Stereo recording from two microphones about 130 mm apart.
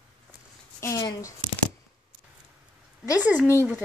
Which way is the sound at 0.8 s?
25° left (ahead or behind).